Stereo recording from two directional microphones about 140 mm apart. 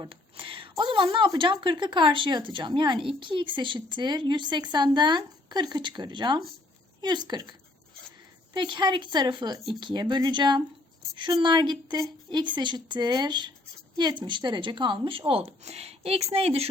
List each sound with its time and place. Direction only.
0.0 s speech: 40° right (ahead or behind)
8.5 s speech: 35° right (ahead or behind)